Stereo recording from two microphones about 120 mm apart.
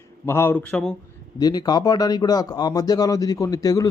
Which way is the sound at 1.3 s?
35° left (ahead or behind).